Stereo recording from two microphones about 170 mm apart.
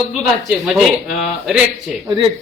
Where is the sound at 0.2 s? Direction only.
5° right (ahead or behind).